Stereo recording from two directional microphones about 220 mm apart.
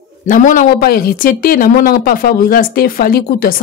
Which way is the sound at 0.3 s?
35° left (ahead or behind).